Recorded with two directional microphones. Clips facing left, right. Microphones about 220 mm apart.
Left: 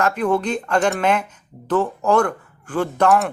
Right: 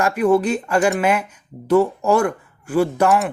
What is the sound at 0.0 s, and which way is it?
Speech, 10° right (ahead or behind).